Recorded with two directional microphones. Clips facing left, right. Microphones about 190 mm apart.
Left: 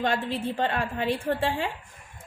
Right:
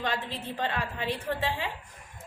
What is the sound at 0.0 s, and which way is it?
A woman's voice, 50° left (ahead or behind).